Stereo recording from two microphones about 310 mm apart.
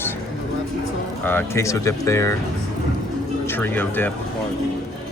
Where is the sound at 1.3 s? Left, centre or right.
Centre.